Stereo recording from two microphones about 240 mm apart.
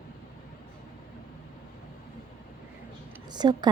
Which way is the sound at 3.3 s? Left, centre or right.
Centre.